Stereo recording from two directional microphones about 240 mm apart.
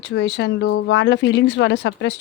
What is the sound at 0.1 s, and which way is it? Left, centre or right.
A woman's voice, left.